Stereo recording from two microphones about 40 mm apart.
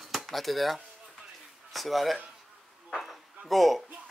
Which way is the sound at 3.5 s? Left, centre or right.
Centre.